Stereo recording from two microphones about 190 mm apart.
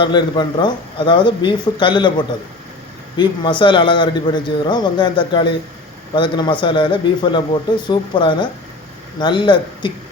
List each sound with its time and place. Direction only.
0.0 s a man's voice: 25° left (ahead or behind)